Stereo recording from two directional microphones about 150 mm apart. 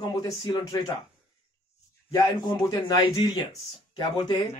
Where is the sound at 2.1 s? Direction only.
25° left (ahead or behind).